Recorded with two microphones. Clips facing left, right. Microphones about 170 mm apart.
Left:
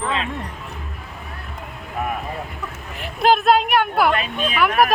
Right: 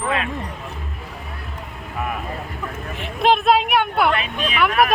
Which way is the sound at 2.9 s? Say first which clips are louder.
Left 1 dB; centre (ahead or behind).